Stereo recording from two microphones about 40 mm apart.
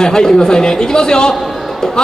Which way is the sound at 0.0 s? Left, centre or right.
Centre.